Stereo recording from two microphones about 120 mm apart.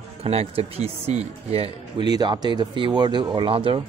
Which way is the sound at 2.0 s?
35° right (ahead or behind).